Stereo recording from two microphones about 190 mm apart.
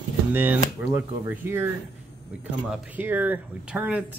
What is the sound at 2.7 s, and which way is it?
Speech, 10° right (ahead or behind).